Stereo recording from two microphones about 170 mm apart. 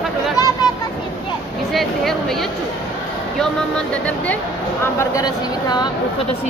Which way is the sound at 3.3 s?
5° left (ahead or behind).